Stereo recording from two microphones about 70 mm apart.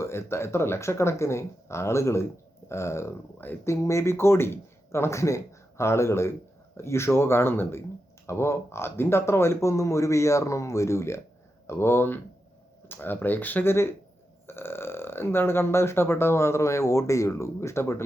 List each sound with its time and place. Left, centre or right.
0.0 s speech: left